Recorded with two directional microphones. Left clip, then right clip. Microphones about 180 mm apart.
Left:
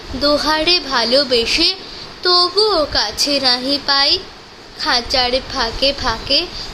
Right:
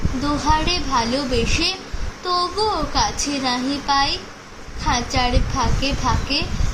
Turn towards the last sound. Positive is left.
turn(degrees=45)  # may be behind; listen again after turning